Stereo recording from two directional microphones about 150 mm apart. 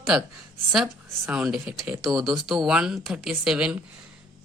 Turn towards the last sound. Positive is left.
turn(degrees=-5)  # may be behind; listen again after turning